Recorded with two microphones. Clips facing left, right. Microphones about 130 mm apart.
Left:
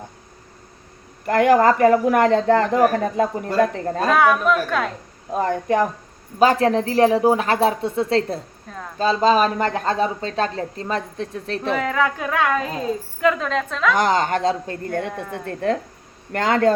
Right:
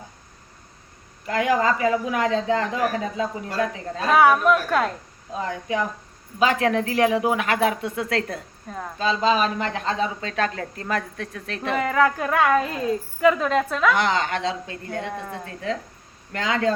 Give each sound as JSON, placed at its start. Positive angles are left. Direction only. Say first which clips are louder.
{"t": 1.2, "sound": "speech", "louder": "left 6 dB", "side_deg": 55}
{"t": 4.1, "sound": "speech", "louder": "right 1 dB", "side_deg": -5}
{"t": 5.3, "sound": "speech", "louder": "left 7 dB", "side_deg": 50}
{"t": 6.4, "sound": "speech", "louder": "left 4 dB", "side_deg": 35}
{"t": 9.0, "sound": "speech", "louder": "left 4 dB", "side_deg": 40}
{"t": 11.7, "sound": "a woman's voice", "louder": "right 1 dB", "side_deg": -5}
{"t": 13.9, "sound": "speech", "louder": "left 4 dB", "side_deg": 40}